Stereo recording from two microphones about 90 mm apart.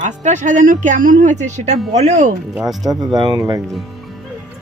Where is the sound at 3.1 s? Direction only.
50° right (ahead or behind).